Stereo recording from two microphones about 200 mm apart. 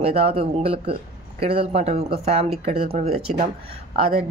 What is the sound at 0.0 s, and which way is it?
Speech, 30° right (ahead or behind).